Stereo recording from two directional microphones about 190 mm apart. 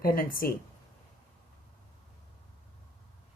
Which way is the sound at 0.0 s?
50° left (ahead or behind).